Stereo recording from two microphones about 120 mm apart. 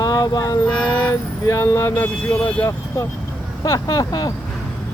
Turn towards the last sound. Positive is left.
turn(degrees=30)  # may be behind; listen again after turning